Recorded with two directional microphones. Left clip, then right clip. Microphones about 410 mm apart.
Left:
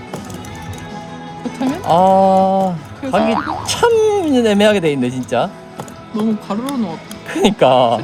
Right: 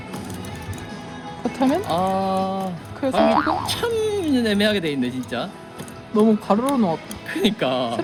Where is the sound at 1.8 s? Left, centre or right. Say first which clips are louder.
Left 11 dB; left.